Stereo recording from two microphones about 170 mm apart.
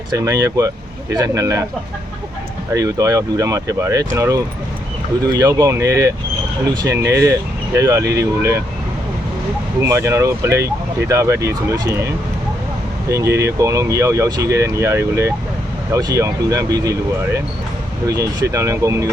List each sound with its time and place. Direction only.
0.1 s speech: 20° right (ahead or behind)
2.7 s speech: 20° right (ahead or behind)
9.8 s speech: 15° right (ahead or behind)
18.5 s speech: 20° right (ahead or behind)